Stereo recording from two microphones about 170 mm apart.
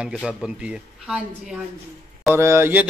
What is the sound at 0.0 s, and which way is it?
Speech, 5° right (ahead or behind).